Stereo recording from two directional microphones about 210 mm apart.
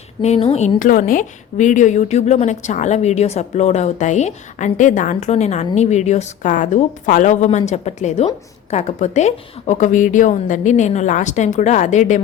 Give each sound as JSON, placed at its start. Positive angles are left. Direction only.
{"t": 0.2, "sound": "a woman's voice", "side_deg": 30}